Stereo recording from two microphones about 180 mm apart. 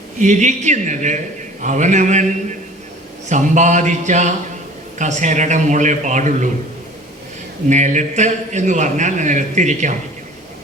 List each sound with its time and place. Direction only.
0.2 s a man's voice: 40° right (ahead or behind)
3.2 s a man's voice: 45° right (ahead or behind)
7.7 s a man's voice: 45° right (ahead or behind)